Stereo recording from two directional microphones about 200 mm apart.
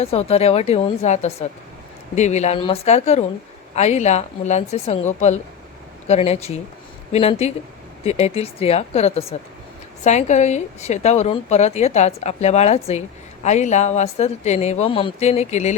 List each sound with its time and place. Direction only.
0.0 s a woman's voice: 30° left (ahead or behind)